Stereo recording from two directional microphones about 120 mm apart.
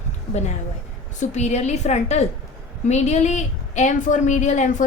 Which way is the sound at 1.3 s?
70° left (ahead or behind).